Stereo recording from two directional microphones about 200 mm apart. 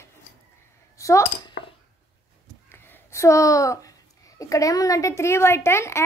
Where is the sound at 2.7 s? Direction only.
10° left (ahead or behind).